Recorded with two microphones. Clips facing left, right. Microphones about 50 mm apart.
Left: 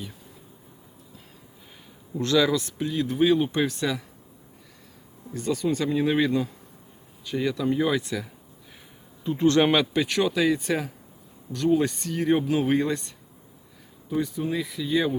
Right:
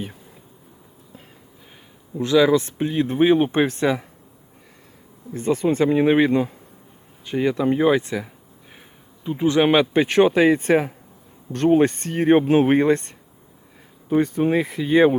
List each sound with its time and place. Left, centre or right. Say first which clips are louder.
2.1 s speech: right 6 dB; centre; by 4.0 s right
5.3 s speech: right 5 dB; right
9.2 s speech: right 2 dB; centre
9.9 s speech: right 8 dB; right